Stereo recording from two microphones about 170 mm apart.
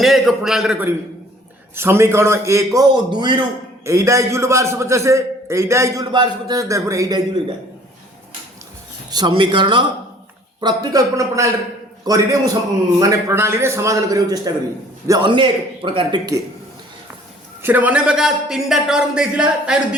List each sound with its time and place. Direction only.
0.0 s a man's voice: centre (ahead or behind); by 7.4 s 20° right (ahead or behind)
9.0 s a man's voice: 25° right (ahead or behind)
17.6 s a man's voice: 10° right (ahead or behind)